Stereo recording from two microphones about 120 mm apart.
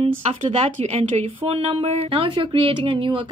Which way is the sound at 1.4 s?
50° right (ahead or behind).